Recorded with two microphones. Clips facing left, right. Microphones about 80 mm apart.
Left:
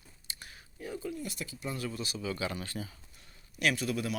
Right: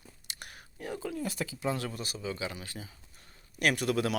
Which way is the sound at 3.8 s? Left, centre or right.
Right.